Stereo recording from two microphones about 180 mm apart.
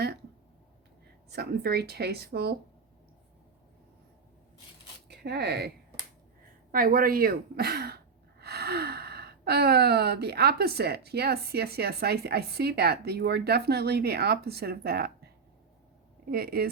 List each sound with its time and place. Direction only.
1.3 s speech: 60° right (ahead or behind)
5.0 s speech: 65° right (ahead or behind)
6.7 s speech: 50° right (ahead or behind)
16.3 s speech: 60° right (ahead or behind)